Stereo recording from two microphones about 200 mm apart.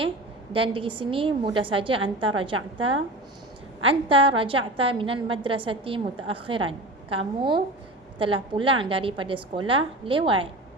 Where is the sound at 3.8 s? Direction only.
25° right (ahead or behind).